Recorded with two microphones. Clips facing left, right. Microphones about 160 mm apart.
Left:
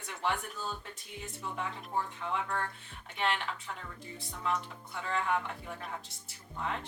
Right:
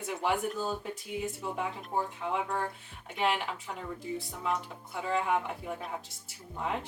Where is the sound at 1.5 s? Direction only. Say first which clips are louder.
Even; 10° right (ahead or behind).